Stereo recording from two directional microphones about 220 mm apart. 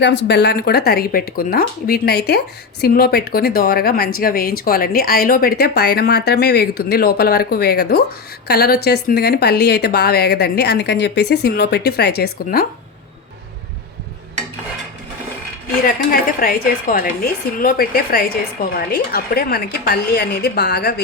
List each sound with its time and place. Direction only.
0.3 s speech: 50° left (ahead or behind)
16.4 s a woman's voice: 40° left (ahead or behind)